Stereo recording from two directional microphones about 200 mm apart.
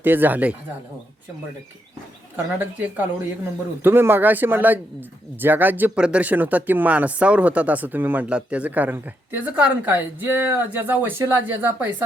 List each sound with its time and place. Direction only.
0.0 s speech: 10° right (ahead or behind)
2.3 s speech: 10° right (ahead or behind)